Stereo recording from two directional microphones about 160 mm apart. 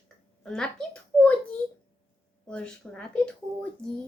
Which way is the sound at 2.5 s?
5° left (ahead or behind).